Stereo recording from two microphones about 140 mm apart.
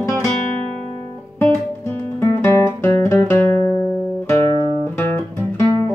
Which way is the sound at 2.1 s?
20° left (ahead or behind).